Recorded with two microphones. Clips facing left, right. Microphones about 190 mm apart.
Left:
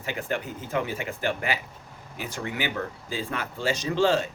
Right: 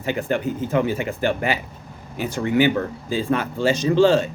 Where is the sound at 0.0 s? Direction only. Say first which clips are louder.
Right 8 dB; 30° right (ahead or behind).